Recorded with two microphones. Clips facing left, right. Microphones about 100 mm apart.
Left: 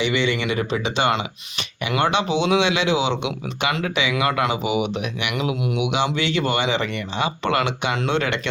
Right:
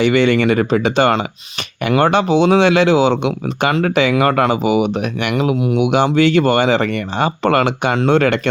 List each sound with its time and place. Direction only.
0.0 s speech: 50° right (ahead or behind)